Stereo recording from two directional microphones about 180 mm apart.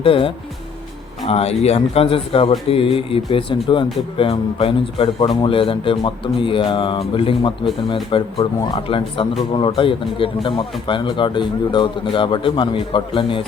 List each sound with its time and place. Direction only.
0.0 s a man's voice: 30° left (ahead or behind)